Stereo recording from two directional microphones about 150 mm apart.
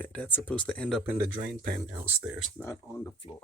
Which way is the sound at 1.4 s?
45° right (ahead or behind).